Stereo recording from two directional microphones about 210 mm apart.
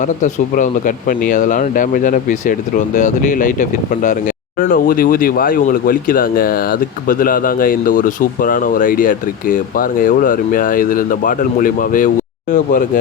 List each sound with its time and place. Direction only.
0.0 s speech: 35° left (ahead or behind)